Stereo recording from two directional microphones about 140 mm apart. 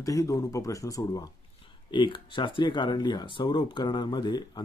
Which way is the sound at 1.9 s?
35° left (ahead or behind).